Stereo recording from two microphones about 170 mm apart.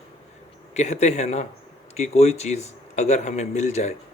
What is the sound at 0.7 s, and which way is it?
Speech, 40° left (ahead or behind).